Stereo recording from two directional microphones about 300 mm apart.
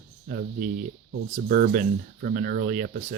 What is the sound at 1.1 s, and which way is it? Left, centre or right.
Speech, right.